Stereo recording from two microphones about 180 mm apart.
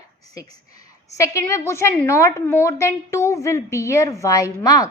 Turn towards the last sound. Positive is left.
turn(degrees=20)  # may be behind; listen again after turning